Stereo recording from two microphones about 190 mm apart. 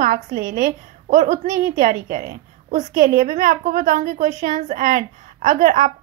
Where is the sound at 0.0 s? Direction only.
45° right (ahead or behind).